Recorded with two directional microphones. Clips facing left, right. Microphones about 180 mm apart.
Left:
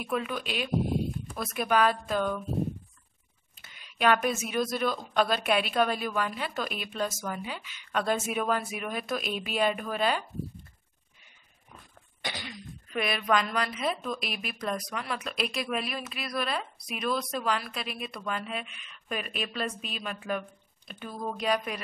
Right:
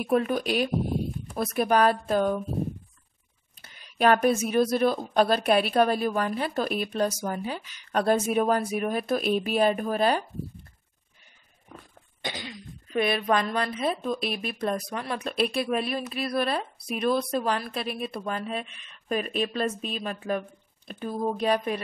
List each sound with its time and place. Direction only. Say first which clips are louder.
0.0 s speech: right 7 dB; 45° right (ahead or behind)
3.7 s speech: right 4 dB; 40° right (ahead or behind)
12.2 s speech: right 3 dB; 20° right (ahead or behind); by 21.1 s 35° right (ahead or behind)
21.1 s speech: right 4 dB; 25° right (ahead or behind)